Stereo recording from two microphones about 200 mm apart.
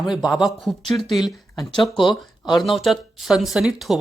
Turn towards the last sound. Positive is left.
turn(degrees=0)  # may be behind; listen again after turning